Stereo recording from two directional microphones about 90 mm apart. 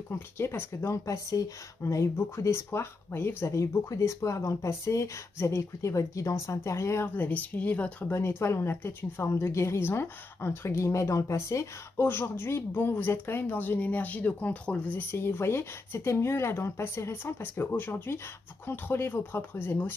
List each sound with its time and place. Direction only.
0.1 s speech: 25° left (ahead or behind)
7.2 s speech: 15° left (ahead or behind)
8.1 s speech: 30° left (ahead or behind)